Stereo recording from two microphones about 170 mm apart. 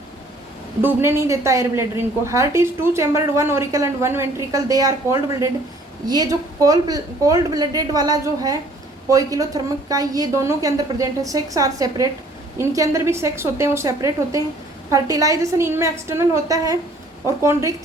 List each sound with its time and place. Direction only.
0.8 s a woman's voice: 15° right (ahead or behind)